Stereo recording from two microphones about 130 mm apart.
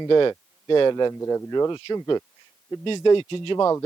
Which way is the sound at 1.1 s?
20° left (ahead or behind).